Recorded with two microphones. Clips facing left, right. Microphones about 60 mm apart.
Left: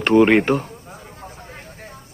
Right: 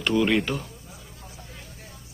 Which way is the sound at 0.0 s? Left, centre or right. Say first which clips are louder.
Left 9 dB; left.